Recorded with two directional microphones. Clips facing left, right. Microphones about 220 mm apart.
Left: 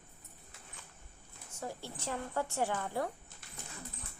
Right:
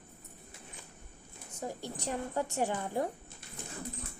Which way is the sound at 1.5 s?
15° right (ahead or behind).